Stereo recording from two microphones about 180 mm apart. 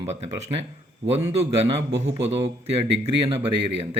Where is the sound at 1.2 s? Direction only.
35° right (ahead or behind).